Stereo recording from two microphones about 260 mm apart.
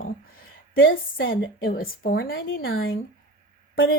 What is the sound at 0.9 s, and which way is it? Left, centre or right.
Speech, left.